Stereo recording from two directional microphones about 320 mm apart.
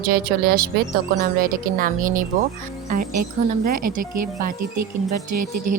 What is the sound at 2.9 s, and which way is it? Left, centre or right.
A woman's voice, right.